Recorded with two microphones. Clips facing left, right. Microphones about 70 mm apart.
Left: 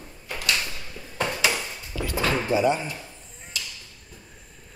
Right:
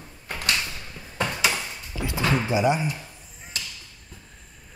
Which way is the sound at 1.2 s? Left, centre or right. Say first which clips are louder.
Even; centre.